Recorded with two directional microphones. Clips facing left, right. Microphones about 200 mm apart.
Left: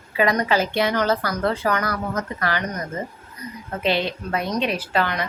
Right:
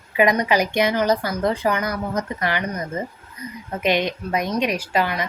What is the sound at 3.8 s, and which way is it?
Speech, 15° right (ahead or behind).